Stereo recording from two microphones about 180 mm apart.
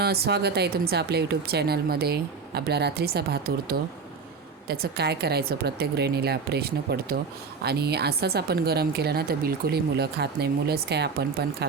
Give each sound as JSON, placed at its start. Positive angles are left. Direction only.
{"t": 0.0, "sound": "a woman's voice", "side_deg": -65}